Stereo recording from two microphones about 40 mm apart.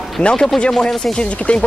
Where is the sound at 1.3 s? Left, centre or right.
Left.